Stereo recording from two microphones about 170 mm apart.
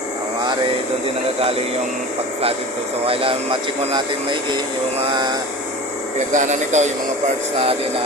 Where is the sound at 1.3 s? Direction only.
35° right (ahead or behind).